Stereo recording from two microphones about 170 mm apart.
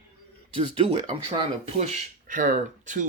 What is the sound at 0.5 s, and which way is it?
Speech, 35° right (ahead or behind).